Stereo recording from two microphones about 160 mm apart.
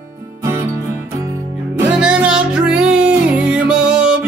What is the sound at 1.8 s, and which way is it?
Music, 5° right (ahead or behind).